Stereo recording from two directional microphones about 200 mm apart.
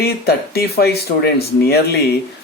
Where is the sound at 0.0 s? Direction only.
55° left (ahead or behind).